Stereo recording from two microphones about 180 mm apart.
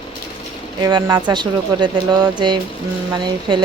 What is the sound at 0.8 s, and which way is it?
Speech, 20° right (ahead or behind).